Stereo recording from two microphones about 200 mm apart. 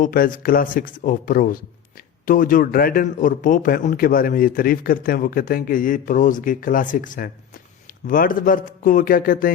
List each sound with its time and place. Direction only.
0.0 s a man's voice: 45° left (ahead or behind)